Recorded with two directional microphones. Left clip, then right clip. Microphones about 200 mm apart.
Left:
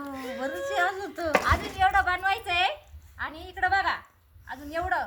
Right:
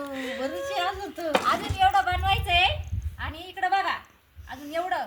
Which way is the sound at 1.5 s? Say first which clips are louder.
Right 2 dB; 10° left (ahead or behind).